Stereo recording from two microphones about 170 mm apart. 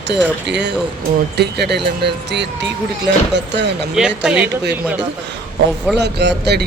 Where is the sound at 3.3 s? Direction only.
90° right.